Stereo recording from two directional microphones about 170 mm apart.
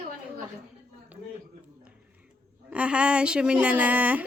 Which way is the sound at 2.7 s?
5° right (ahead or behind).